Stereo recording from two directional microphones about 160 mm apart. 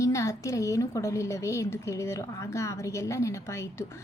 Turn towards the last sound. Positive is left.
turn(degrees=15)  # may be behind; listen again after turning